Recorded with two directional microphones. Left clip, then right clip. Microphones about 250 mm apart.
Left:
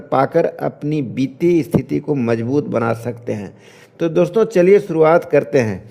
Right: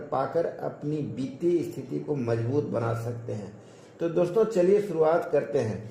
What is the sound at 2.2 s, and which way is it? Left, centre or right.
Speech, left.